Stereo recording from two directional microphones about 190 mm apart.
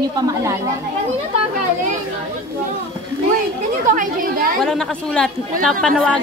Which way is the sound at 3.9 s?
50° right (ahead or behind).